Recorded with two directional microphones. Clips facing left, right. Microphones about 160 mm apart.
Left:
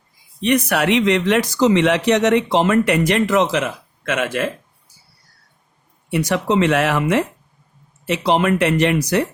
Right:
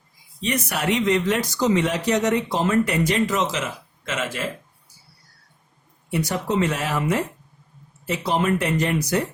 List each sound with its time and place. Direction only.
0.3 s speech: 65° left (ahead or behind)
6.1 s speech: 90° left
8.3 s speech: 75° left (ahead or behind)